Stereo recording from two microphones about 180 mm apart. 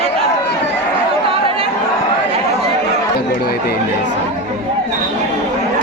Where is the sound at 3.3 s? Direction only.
60° left (ahead or behind).